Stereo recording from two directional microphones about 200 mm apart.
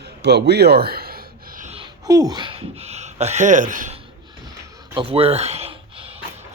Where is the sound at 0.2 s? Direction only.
55° right (ahead or behind).